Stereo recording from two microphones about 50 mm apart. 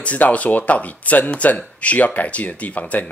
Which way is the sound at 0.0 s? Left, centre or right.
Left.